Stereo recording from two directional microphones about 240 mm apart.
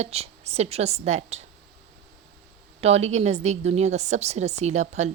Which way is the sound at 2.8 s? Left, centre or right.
Right.